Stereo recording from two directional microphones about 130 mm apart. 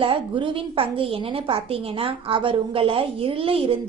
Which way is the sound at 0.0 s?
40° right (ahead or behind).